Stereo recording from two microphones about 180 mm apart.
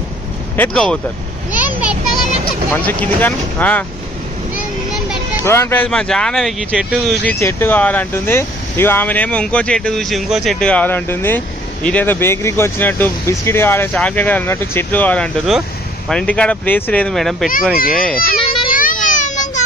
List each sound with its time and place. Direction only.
0.6 s speech: 5° left (ahead or behind)
1.5 s a sound: 10° right (ahead or behind)
2.7 s speech: 10° left (ahead or behind)
5.4 s speech: 15° left (ahead or behind)
7.3 s speech: 15° left (ahead or behind)
17.7 s a child's voice: 55° left (ahead or behind)
18.7 s a sound: 50° left (ahead or behind)